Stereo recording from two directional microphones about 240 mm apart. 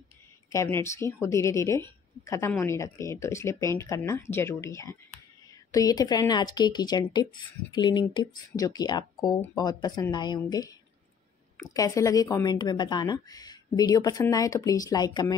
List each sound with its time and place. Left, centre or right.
0.5 s speech: centre